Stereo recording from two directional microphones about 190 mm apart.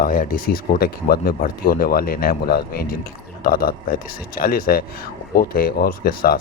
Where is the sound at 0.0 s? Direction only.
50° left (ahead or behind).